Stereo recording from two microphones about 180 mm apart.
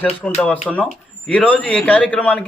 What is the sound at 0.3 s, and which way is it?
A man's voice, 10° left (ahead or behind).